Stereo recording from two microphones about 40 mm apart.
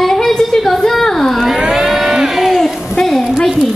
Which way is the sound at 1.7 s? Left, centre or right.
Centre.